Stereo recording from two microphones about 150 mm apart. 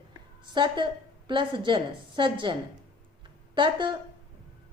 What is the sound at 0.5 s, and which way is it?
A woman's voice, 30° right (ahead or behind).